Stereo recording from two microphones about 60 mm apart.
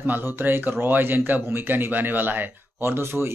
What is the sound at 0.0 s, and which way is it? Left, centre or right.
Speech, right.